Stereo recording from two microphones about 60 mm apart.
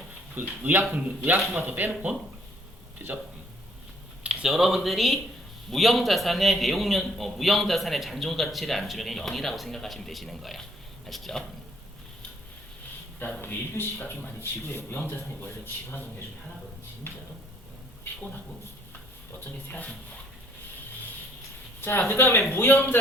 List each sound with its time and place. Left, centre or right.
0.3 s a man's voice: right
4.2 s a sound: centre
4.4 s a man's voice: centre
13.4 s speech: left
19.5 s speech: left
21.8 s a sound: left
22.1 s speech: left